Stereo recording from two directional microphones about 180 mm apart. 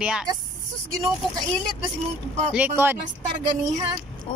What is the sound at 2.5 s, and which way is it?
Speech, 10° right (ahead or behind).